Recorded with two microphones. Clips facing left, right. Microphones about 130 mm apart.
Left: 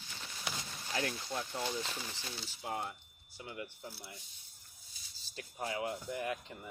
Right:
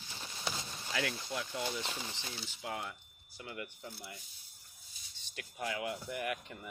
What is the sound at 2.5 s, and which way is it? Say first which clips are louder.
Speech: left 2 dB; 30° left (ahead or behind).